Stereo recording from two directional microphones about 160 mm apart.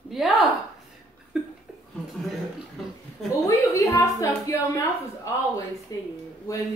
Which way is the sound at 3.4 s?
20° left (ahead or behind).